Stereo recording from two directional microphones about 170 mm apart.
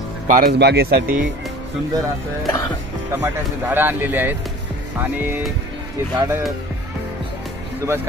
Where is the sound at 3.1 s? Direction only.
10° right (ahead or behind).